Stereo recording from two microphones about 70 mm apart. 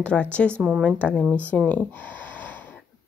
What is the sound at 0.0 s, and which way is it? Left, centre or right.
Speech, centre.